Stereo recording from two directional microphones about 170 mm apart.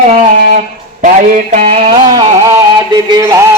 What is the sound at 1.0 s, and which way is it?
A man's voice, 45° right (ahead or behind).